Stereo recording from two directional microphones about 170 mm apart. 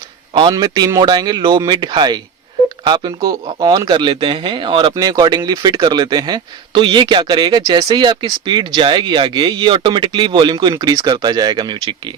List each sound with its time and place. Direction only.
0.3 s speech: 25° right (ahead or behind)